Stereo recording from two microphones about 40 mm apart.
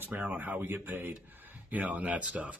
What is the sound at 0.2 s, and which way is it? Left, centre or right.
Speech, right.